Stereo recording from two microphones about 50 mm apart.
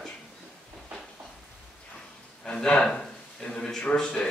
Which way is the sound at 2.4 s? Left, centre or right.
Centre.